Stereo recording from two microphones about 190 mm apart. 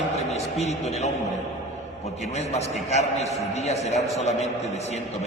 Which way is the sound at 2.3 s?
35° left (ahead or behind).